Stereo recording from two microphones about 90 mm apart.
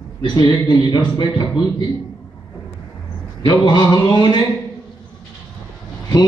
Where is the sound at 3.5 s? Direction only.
50° left (ahead or behind).